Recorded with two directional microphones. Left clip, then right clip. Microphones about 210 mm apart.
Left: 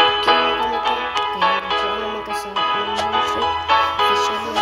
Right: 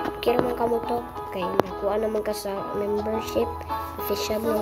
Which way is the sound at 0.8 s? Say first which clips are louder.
Left 9 dB; 50° left (ahead or behind).